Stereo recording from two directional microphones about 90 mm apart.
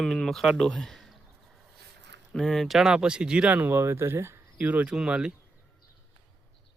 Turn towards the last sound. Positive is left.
turn(degrees=-10)  # may be behind; listen again after turning